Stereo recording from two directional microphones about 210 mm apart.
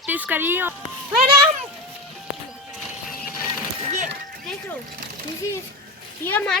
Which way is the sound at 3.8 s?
35° right (ahead or behind).